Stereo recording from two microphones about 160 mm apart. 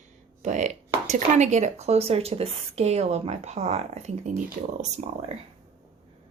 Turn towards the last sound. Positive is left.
turn(degrees=-40)  # may be behind; listen again after turning